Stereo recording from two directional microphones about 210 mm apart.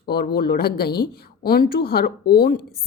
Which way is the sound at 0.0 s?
45° left (ahead or behind).